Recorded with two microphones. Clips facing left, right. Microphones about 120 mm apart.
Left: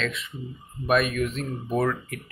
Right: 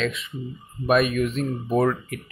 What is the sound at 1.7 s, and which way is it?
Speech, 20° right (ahead or behind).